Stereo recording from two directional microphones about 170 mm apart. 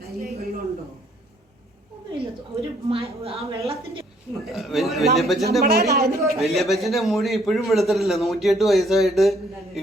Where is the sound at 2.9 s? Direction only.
35° right (ahead or behind).